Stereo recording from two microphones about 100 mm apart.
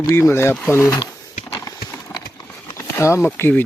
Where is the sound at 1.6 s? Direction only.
30° left (ahead or behind).